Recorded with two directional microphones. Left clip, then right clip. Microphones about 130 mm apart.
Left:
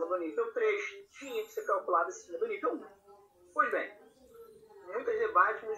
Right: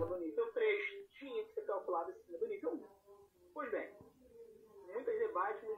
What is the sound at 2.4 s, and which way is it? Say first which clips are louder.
Speech: left 7 dB; 30° left (ahead or behind).